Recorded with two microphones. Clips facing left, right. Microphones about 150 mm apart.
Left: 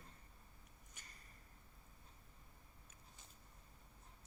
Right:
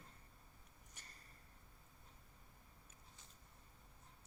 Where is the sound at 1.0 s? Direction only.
35° right (ahead or behind).